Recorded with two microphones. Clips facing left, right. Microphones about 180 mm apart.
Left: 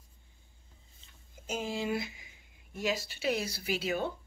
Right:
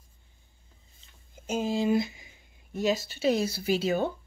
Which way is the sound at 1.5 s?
25° right (ahead or behind).